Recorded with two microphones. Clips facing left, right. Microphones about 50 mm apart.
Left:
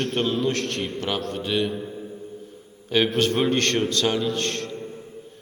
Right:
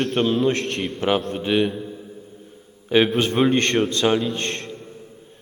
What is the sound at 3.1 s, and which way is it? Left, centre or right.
A man's voice, centre.